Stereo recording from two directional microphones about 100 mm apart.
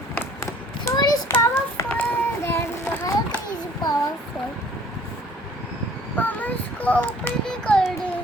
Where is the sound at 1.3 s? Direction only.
25° left (ahead or behind).